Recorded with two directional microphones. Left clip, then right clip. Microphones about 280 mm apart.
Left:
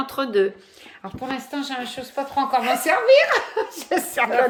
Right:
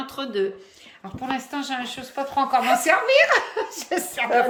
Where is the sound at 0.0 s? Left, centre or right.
Centre.